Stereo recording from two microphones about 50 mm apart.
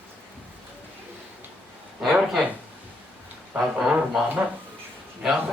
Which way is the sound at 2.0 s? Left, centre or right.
Centre.